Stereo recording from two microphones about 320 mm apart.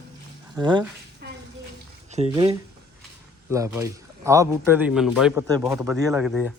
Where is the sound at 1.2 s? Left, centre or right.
Right.